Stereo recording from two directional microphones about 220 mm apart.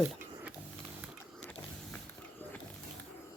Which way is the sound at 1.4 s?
5° left (ahead or behind).